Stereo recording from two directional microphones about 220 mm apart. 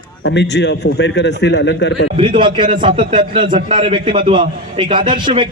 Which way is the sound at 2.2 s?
25° right (ahead or behind).